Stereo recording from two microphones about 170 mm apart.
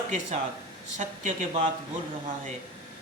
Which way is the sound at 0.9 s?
45° right (ahead or behind).